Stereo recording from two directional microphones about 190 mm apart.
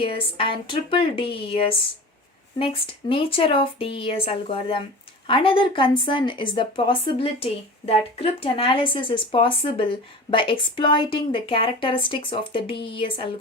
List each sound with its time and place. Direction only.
0.0 s speech: 30° left (ahead or behind)